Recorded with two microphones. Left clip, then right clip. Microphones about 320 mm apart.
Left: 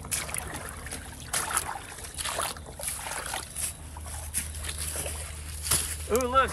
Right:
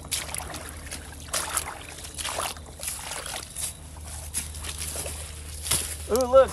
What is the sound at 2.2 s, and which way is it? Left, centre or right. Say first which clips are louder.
Boat: right 1 dB; centre.